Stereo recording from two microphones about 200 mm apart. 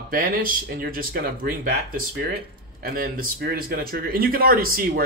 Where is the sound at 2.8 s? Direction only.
45° right (ahead or behind).